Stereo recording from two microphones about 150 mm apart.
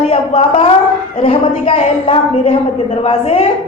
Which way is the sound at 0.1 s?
40° left (ahead or behind).